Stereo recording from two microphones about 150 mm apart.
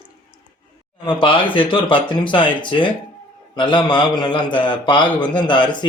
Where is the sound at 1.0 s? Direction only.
35° left (ahead or behind).